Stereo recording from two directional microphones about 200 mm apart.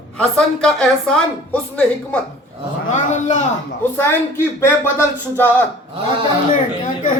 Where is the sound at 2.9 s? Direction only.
40° left (ahead or behind).